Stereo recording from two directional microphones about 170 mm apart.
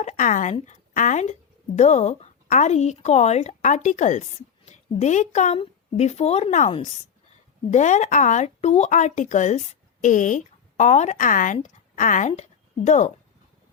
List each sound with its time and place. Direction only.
0.0 s a woman's voice: 45° left (ahead or behind)